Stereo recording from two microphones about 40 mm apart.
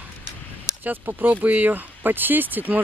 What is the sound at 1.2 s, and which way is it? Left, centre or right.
Speech, right.